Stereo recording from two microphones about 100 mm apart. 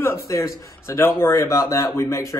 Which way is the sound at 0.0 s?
30° left (ahead or behind).